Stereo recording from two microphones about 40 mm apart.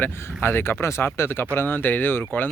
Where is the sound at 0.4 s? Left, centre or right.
Left.